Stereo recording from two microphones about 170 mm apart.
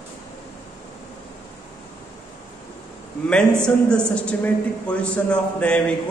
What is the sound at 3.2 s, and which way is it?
A man's voice, 5° left (ahead or behind).